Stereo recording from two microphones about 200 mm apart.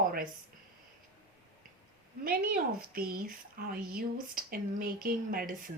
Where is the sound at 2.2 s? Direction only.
45° right (ahead or behind).